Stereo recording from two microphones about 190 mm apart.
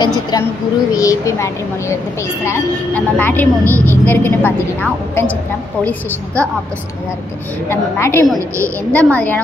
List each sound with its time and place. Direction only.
0.0 s a woman's voice: 20° left (ahead or behind)
7.7 s a woman's voice: 15° left (ahead or behind)